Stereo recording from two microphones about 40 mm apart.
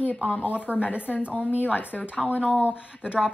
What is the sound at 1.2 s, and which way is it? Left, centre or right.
Speech, right.